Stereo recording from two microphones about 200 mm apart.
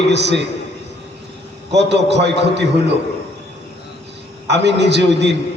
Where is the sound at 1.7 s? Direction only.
60° right (ahead or behind).